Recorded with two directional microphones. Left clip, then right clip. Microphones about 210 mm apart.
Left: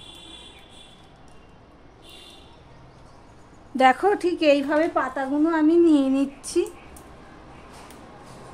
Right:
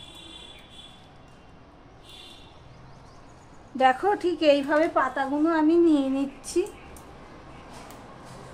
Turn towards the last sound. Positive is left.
turn(degrees=35)  # may be behind; listen again after turning